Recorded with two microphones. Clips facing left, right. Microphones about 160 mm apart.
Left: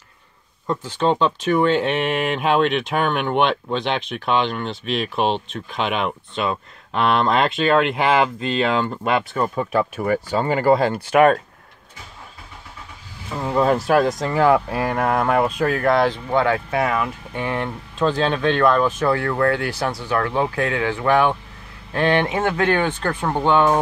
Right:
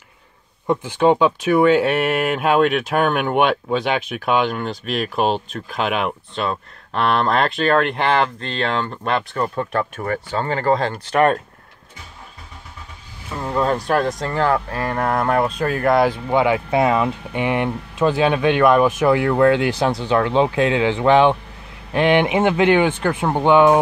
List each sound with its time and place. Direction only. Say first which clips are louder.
0.7 s speech: right 4 dB; 10° right (ahead or behind); by 11.3 s 5° left (ahead or behind)
13.3 s speech: left 2 dB; 5° left (ahead or behind); by 23.8 s 15° right (ahead or behind)